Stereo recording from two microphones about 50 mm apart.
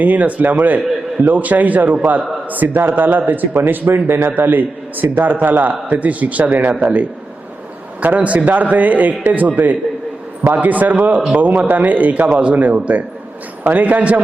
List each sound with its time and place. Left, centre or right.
0.0 s a man's voice: right
8.0 s a man's voice: right